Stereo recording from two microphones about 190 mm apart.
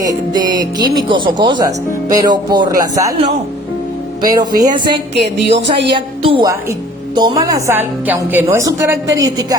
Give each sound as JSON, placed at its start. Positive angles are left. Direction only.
{"t": 0.4, "sound": "speech", "side_deg": -20}
{"t": 4.3, "sound": "speech", "side_deg": -20}
{"t": 5.1, "sound": "music", "side_deg": -65}
{"t": 5.9, "sound": "a woman's voice", "side_deg": -25}